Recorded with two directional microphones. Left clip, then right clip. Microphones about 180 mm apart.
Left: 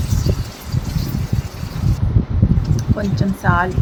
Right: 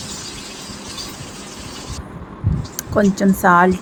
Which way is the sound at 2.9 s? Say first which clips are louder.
Right 12 dB; 15° right (ahead or behind).